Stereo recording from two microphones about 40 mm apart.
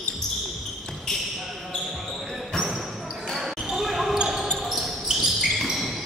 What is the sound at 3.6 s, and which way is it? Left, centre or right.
Basketball bounce, centre.